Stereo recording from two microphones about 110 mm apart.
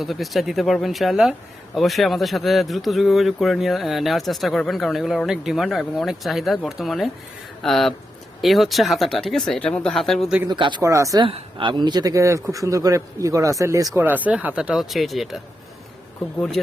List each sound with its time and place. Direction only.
0.0 s speech: centre (ahead or behind)
10.5 s speech: 45° right (ahead or behind)
10.8 s speech: 30° right (ahead or behind)
11.3 s a man's voice: 60° right (ahead or behind); by 14.0 s 30° right (ahead or behind)
14.0 s speech: 15° right (ahead or behind)